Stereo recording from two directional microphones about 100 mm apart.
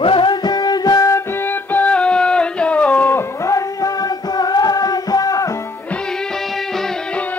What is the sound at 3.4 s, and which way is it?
Music, 35° left (ahead or behind).